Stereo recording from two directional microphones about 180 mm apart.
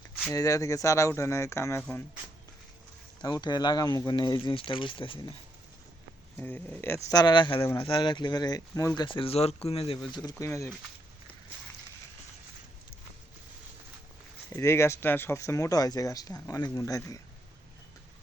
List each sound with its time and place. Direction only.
0.3 s speech: 20° left (ahead or behind)
3.2 s speech: 25° left (ahead or behind)
6.3 s speech: 10° left (ahead or behind)
9.0 s speech: 30° left (ahead or behind)
14.5 s speech: 15° left (ahead or behind)